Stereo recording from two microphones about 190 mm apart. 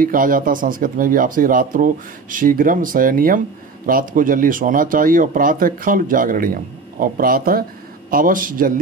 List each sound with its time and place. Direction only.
0.0 s speech: 45° right (ahead or behind)